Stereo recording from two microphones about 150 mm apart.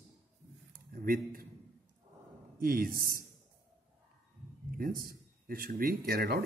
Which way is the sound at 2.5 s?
70° right (ahead or behind).